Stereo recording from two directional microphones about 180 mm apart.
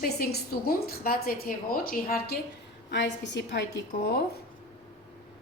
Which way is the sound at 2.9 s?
80° left.